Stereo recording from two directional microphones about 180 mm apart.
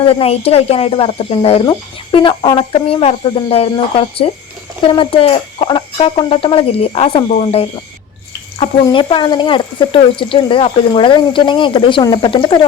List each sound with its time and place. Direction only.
0.0 s speech: 30° left (ahead or behind)